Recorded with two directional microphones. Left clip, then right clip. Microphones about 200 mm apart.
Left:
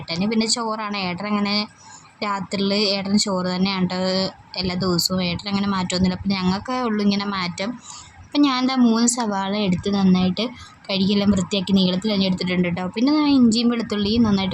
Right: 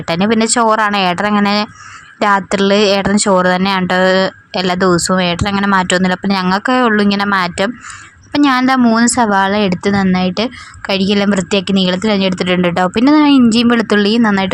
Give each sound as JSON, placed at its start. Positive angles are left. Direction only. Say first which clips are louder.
{"t": 0.1, "sound": "a woman's voice", "louder": "right 9 dB", "side_deg": -30}